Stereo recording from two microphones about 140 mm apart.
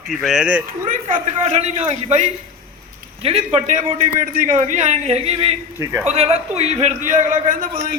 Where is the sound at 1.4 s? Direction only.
50° right (ahead or behind).